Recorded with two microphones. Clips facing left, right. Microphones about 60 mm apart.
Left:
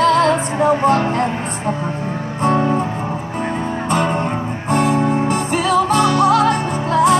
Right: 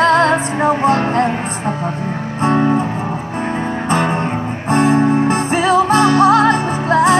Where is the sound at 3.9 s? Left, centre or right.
Right.